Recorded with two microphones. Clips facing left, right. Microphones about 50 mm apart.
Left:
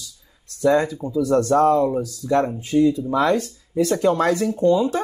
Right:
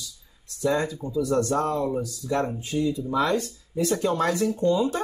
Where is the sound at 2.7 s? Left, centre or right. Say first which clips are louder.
Left 10 dB; left.